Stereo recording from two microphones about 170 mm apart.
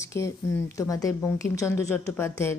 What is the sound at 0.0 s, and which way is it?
Speech, 15° left (ahead or behind).